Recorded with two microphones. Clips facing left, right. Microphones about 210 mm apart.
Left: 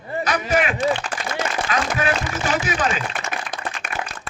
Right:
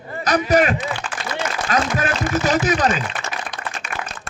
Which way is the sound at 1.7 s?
40° right (ahead or behind).